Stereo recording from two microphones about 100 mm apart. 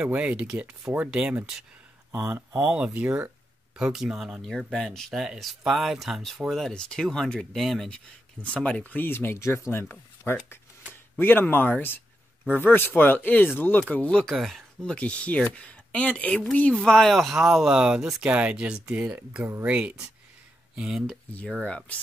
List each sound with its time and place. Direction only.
0.0 s speech: 15° right (ahead or behind)
2.6 s speech: 15° right (ahead or behind)
21.1 s speech: 10° left (ahead or behind)